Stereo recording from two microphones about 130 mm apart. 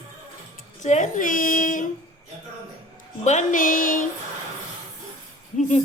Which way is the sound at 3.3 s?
80° left.